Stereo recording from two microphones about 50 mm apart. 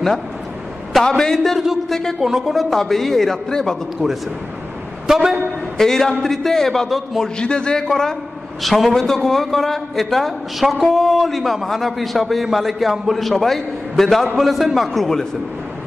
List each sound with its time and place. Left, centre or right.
1.0 s a man's voice: centre
2.1 s a man's voice: centre
5.0 s a woman's voice: centre
5.8 s a man's voice: centre
7.3 s a man's voice: centre
8.6 s a man's voice: centre